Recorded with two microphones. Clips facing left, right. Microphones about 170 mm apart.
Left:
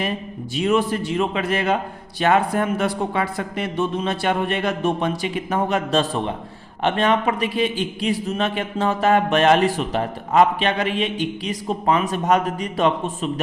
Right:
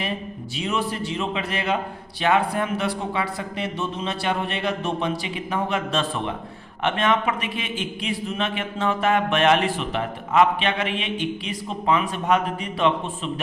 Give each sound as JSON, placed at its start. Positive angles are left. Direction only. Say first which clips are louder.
{"t": 0.5, "sound": "a man's voice", "louder": "left 7 dB", "side_deg": 50}